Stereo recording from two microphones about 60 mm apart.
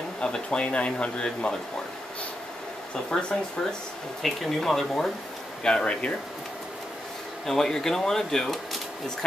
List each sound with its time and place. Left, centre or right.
0.2 s speech: centre
3.1 s speech: centre
4.2 s speech: centre
7.4 s speech: centre